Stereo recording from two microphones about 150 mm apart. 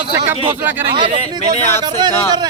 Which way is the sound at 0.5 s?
15° right (ahead or behind).